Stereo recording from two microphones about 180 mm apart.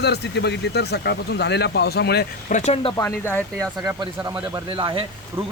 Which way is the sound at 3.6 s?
20° right (ahead or behind).